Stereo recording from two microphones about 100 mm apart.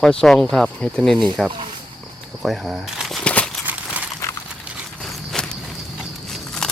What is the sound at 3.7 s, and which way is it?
Crumpling, 15° right (ahead or behind).